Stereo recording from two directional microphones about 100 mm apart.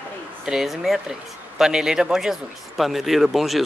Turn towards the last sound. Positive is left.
turn(degrees=0)  # may be behind; listen again after turning